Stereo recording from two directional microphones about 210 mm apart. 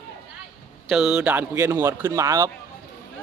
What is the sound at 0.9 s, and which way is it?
A man's voice, 5° right (ahead or behind).